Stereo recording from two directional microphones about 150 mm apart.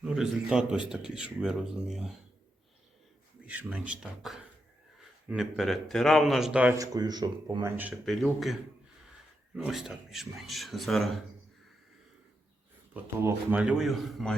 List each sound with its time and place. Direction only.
0.0 s speech: 5° right (ahead or behind)
3.4 s speech: 10° right (ahead or behind)
6.7 s speech: 25° right (ahead or behind)
8.0 s speech: centre (ahead or behind)
9.6 s speech: centre (ahead or behind)
12.9 s speech: 10° right (ahead or behind)